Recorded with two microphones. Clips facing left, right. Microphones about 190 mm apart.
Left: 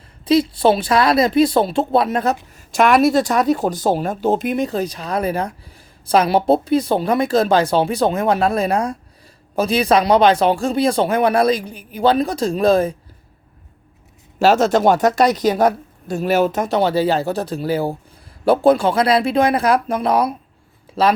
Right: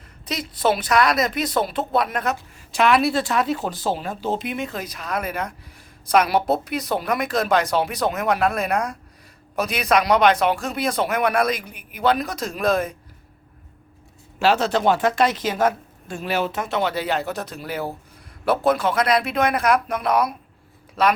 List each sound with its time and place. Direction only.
0.3 s speech: 30° left (ahead or behind)
2.7 s speech: 45° left (ahead or behind); by 13.0 s 30° left (ahead or behind)
14.3 s speech: 45° left (ahead or behind)